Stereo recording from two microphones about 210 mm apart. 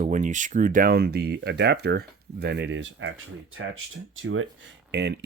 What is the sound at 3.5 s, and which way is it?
Speech, 70° right (ahead or behind).